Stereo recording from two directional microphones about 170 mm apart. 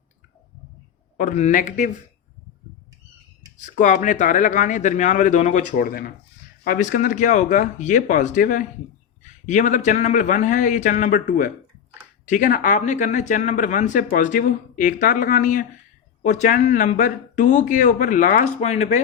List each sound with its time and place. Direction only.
1.1 s speech: 45° left (ahead or behind)
3.6 s speech: 50° left (ahead or behind)